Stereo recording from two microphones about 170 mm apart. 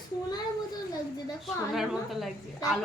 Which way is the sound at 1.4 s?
Centre (ahead or behind).